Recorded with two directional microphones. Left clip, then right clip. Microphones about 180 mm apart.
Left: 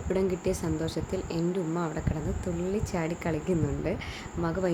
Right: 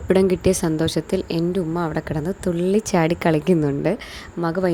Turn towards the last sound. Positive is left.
turn(degrees=-45)  # may be behind; listen again after turning